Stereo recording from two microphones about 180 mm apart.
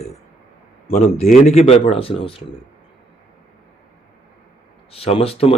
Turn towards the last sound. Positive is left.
turn(degrees=30)  # may be behind; listen again after turning